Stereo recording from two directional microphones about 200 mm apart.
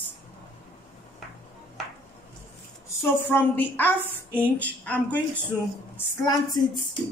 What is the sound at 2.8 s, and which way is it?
A woman's voice, 10° left (ahead or behind).